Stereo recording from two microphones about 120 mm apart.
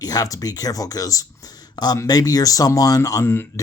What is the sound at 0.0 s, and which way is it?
Speech, 30° left (ahead or behind).